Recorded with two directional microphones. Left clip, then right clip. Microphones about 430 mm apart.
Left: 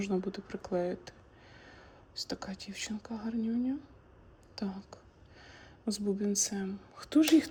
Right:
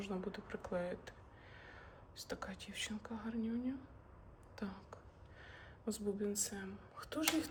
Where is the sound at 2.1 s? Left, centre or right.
Centre.